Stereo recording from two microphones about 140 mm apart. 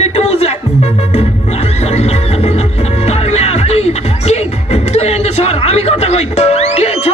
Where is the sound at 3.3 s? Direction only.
50° left (ahead or behind).